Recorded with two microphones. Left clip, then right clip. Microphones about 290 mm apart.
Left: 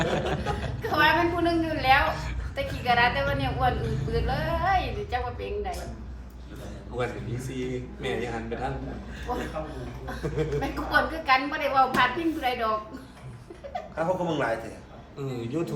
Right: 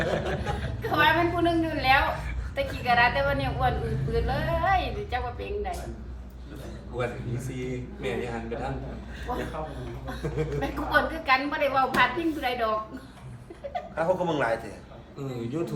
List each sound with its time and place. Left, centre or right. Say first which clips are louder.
0.0 s a sound: left 1 dB; centre
2.6 s a woman's voice: right 1 dB; centre
6.9 s a woman's voice: even; centre
13.7 s speech: right 1 dB; centre